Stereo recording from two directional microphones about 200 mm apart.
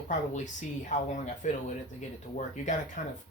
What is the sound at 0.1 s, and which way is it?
Speech, 40° left (ahead or behind).